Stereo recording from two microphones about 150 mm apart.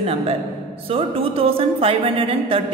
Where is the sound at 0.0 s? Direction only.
40° right (ahead or behind).